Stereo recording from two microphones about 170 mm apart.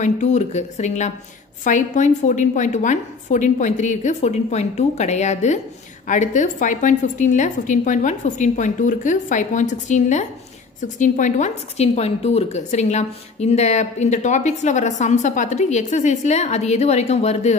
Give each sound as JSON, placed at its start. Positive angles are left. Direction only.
{"t": 0.0, "sound": "a woman's voice", "side_deg": 45}